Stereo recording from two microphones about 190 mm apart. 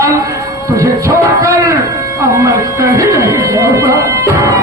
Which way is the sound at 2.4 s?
15° right (ahead or behind).